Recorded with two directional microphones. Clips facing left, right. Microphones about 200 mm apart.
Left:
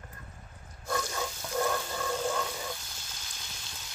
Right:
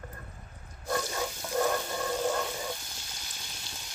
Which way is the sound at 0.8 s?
15° right (ahead or behind).